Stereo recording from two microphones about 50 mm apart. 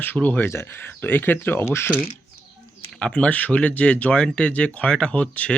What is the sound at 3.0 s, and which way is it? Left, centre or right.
Speech, left.